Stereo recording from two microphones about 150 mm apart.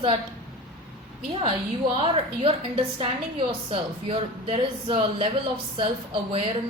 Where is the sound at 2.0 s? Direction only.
40° right (ahead or behind).